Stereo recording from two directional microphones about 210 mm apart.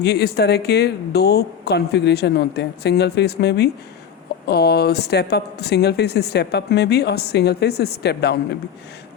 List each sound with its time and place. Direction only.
0.0 s speech: 50° left (ahead or behind)